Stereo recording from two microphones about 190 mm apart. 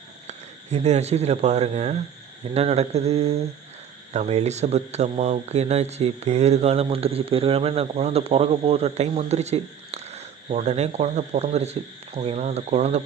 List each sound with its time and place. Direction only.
0.3 s speech: 35° right (ahead or behind)